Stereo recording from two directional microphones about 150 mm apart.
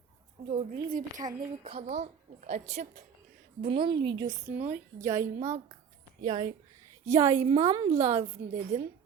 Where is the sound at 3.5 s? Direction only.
35° right (ahead or behind).